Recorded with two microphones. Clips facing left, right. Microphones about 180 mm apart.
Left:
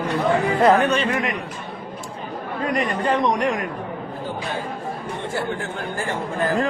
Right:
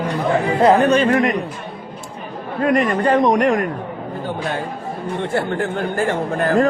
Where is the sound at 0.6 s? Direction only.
30° right (ahead or behind).